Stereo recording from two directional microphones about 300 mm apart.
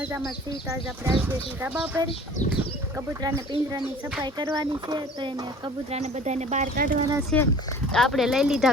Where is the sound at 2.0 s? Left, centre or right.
Centre.